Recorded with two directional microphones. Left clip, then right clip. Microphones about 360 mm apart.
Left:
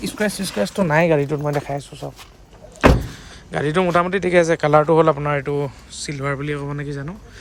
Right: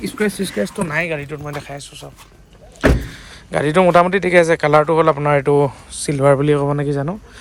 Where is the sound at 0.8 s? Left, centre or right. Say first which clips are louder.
Left 5 dB; left.